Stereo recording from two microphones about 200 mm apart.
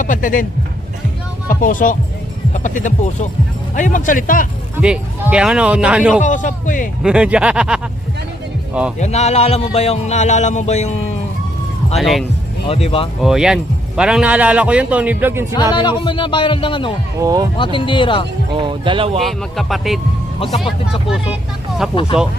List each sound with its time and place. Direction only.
0.0 s speech: 40° left (ahead or behind)
1.5 s speech: 40° left (ahead or behind)
4.8 s a man's voice: 5° right (ahead or behind)
6.2 s speech: 40° left (ahead or behind)
7.0 s a man's voice: 5° right (ahead or behind)
9.0 s speech: 35° left (ahead or behind)
11.9 s a man's voice: centre (ahead or behind)
12.6 s speech: 30° left (ahead or behind)
13.2 s speech: 5° right (ahead or behind)
15.7 s speech: 25° left (ahead or behind)
17.2 s speech: 15° right (ahead or behind)
17.7 s speech: 25° left (ahead or behind)
18.5 s speech: 25° right (ahead or behind)
19.2 s a man's voice: centre (ahead or behind)